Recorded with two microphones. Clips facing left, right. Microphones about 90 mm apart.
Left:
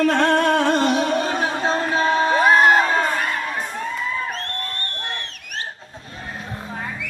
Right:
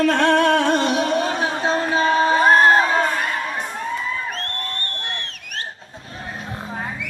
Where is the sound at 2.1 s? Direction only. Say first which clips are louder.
Right 2 dB; 25° right (ahead or behind).